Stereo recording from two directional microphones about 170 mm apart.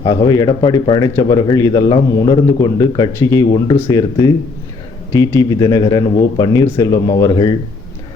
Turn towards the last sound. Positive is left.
turn(degrees=25)  # may be behind; listen again after turning